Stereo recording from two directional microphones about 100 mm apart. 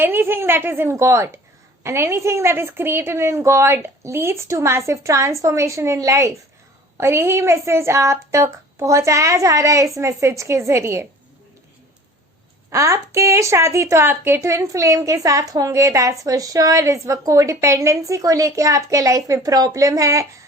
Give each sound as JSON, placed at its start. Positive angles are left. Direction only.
{"t": 0.0, "sound": "a woman's voice", "side_deg": -20}
{"t": 12.7, "sound": "a woman's voice", "side_deg": -30}